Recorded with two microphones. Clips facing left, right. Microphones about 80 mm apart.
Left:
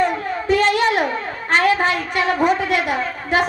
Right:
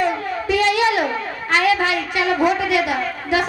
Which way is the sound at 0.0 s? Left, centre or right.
Left.